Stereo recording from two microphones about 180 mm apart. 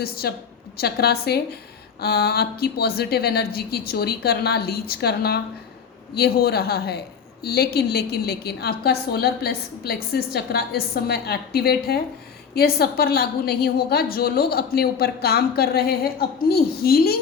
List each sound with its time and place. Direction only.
0.0 s a woman's voice: 60° left (ahead or behind)